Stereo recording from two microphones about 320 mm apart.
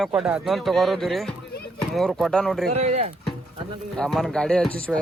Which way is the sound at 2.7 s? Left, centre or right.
Right.